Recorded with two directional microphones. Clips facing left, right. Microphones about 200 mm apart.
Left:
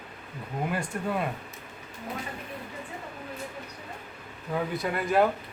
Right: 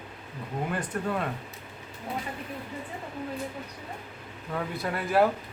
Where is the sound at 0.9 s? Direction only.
10° left (ahead or behind).